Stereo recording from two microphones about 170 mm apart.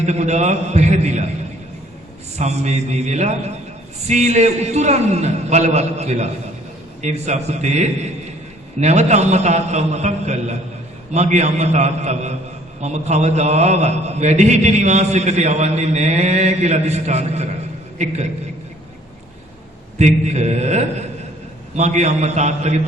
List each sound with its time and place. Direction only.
0.0 s a man's voice: 40° right (ahead or behind)
2.4 s a man's voice: 40° right (ahead or behind)
20.0 s a man's voice: 45° right (ahead or behind)